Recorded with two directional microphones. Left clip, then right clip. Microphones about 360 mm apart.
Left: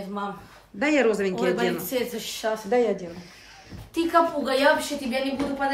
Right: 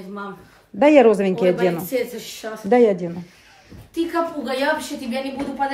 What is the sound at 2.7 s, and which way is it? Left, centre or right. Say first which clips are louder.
Speech: right 8 dB; centre.